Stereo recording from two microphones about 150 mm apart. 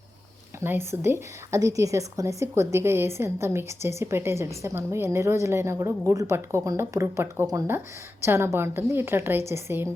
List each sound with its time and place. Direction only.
0.6 s a woman's voice: 15° right (ahead or behind)